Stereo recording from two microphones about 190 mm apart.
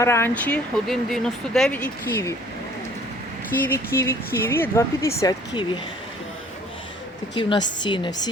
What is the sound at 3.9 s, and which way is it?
Speech, 10° left (ahead or behind).